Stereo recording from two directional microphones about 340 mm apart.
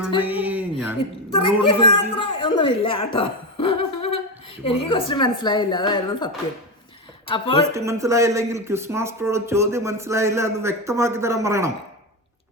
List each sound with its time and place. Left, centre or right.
0.2 s a sound: centre
1.5 s a man's voice: centre
7.6 s speech: centre